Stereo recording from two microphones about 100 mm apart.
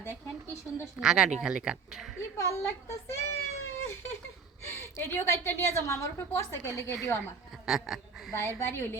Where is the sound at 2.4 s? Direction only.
30° left (ahead or behind).